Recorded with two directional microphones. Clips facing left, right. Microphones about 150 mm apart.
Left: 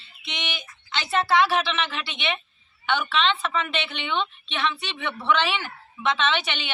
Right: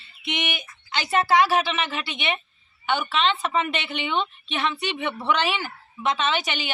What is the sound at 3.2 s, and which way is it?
Speech, 10° right (ahead or behind).